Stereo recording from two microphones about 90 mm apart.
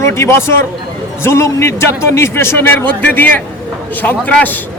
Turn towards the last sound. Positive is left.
turn(degrees=20)  # may be behind; listen again after turning